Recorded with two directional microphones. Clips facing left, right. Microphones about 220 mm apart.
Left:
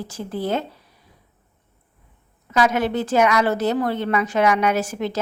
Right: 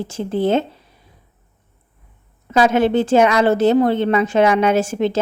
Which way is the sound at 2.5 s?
30° right (ahead or behind).